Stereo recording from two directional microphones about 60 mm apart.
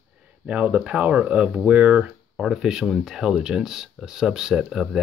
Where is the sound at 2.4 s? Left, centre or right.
Centre.